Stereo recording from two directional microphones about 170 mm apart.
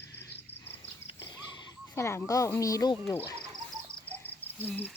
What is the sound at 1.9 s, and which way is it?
Speech, 15° left (ahead or behind).